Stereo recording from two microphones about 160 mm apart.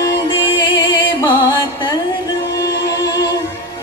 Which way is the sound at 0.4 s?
30° left (ahead or behind).